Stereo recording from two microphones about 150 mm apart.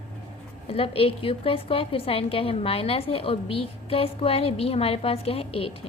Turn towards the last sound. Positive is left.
turn(degrees=40)  # may be behind; listen again after turning